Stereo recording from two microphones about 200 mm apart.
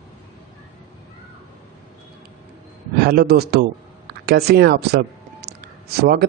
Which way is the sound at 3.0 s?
50° right (ahead or behind).